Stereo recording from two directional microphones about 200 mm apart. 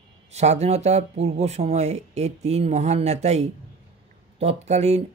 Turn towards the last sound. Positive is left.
turn(degrees=-35)  # may be behind; listen again after turning